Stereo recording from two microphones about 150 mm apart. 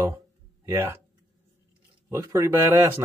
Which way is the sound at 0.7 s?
15° right (ahead or behind).